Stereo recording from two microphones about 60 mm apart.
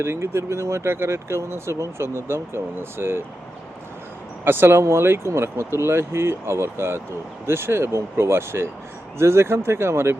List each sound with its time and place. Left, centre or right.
0.0 s speech: right
4.4 s speech: right